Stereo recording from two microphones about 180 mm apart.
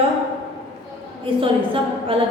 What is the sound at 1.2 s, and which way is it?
A woman's voice, 30° right (ahead or behind).